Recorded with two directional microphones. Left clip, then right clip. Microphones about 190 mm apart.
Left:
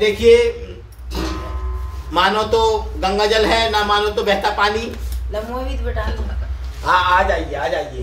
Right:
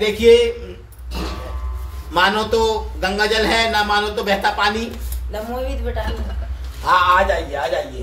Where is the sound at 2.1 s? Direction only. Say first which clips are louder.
Left 1 dB; centre (ahead or behind).